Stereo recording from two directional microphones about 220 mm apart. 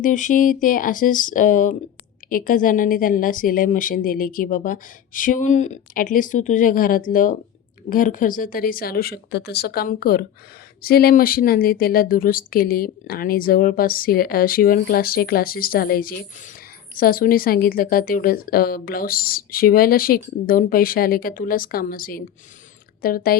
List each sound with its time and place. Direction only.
0.0 s a woman's voice: 35° left (ahead or behind)